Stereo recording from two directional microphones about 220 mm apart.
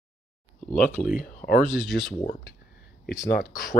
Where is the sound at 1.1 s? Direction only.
40° left (ahead or behind).